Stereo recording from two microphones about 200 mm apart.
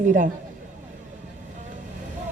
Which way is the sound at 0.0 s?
40° right (ahead or behind).